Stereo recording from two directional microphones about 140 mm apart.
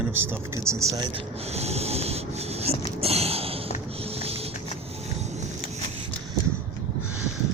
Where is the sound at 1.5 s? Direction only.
50° right (ahead or behind).